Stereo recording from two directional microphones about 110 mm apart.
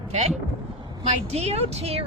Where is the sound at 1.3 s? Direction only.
70° right (ahead or behind).